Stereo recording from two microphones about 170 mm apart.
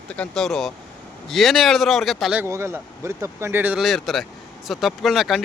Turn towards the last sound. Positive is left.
turn(degrees=0)  # may be behind; listen again after turning